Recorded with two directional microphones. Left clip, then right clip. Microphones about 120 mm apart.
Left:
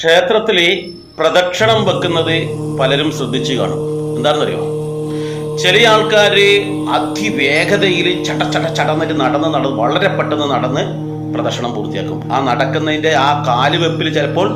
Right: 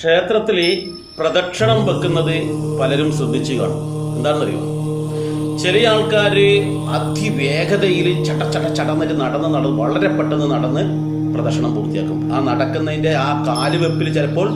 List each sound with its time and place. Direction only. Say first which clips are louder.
0.0 s speech: left 4 dB; 20° right (ahead or behind)
4.2 s speech: left 3 dB; 20° right (ahead or behind)
5.6 s speech: left 5 dB; 20° right (ahead or behind)
12.3 s speech: left 5 dB; 20° right (ahead or behind)